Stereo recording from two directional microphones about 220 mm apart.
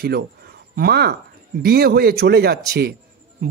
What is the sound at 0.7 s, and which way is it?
A man's voice, 45° right (ahead or behind).